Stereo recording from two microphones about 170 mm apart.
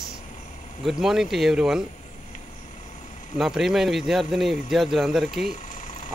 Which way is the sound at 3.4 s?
5° right (ahead or behind).